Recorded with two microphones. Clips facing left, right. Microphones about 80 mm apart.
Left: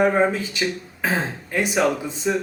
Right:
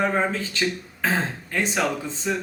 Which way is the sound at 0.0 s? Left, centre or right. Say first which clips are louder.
Left 5 dB; centre.